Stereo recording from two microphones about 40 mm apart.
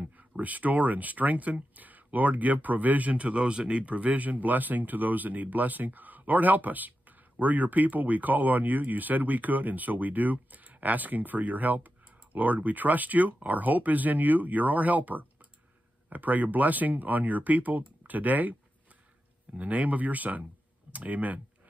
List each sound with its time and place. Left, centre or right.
0.0 s speech: right